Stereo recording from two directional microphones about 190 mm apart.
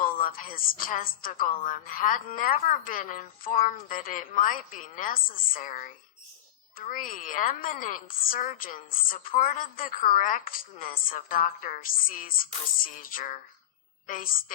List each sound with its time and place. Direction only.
0.0 s a woman's voice: 45° left (ahead or behind)